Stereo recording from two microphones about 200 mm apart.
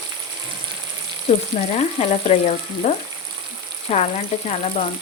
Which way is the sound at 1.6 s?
35° left (ahead or behind).